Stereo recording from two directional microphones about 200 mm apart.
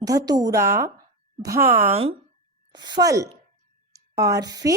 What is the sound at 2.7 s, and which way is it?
A woman's voice, 20° right (ahead or behind).